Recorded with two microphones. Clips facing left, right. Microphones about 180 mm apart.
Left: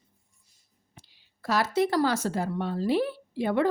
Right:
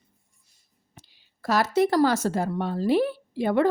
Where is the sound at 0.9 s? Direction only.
45° right (ahead or behind).